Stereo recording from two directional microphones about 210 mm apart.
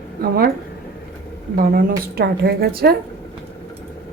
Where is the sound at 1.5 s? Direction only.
45° right (ahead or behind).